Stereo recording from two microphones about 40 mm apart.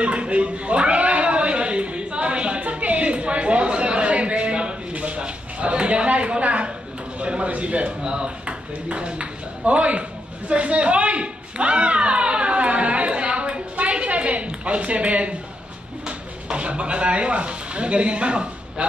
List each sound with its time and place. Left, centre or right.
0.0 s cat: right
7.2 s a man's voice: right
10.5 s a sound: right
16.4 s speech: right